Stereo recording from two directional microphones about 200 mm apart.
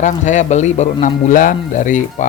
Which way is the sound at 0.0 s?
40° left (ahead or behind).